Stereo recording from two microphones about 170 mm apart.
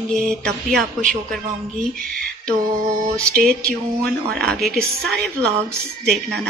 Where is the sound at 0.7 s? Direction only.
5° left (ahead or behind).